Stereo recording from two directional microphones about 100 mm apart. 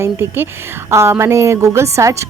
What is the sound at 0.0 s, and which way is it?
A woman's voice, 25° right (ahead or behind).